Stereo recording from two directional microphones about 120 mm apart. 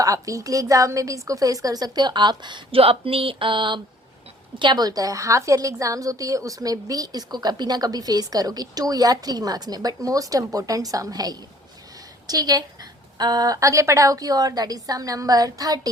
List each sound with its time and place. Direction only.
0.0 s a woman's voice: 30° right (ahead or behind)
2.8 s a sound: 50° right (ahead or behind)
4.6 s a woman's voice: 35° right (ahead or behind)